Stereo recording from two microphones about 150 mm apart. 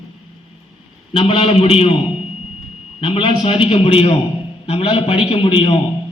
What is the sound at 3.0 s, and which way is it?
A man's voice, 35° left (ahead or behind).